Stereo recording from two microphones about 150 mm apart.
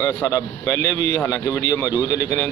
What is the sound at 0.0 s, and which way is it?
A man's voice, 20° left (ahead or behind).